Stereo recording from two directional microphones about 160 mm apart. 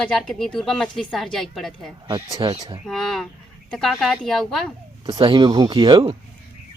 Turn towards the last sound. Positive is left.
turn(degrees=-30)  # may be behind; listen again after turning